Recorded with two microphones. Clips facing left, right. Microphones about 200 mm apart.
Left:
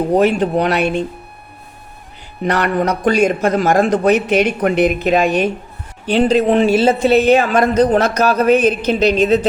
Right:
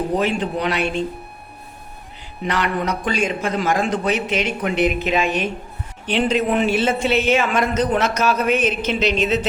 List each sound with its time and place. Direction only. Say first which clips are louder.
0.2 s a man's voice: left 7 dB; 50° left (ahead or behind)
2.4 s a man's voice: left 6 dB; 45° left (ahead or behind)
4.3 s speech: left 7 dB; 60° left (ahead or behind)
4.8 s a man's voice: left 4 dB; 40° left (ahead or behind)